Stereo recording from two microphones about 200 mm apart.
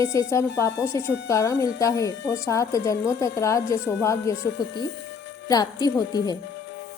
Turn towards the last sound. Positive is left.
turn(degrees=20)  # may be behind; listen again after turning